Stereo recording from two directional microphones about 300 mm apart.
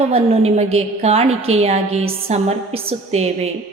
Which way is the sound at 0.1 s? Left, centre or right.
Centre.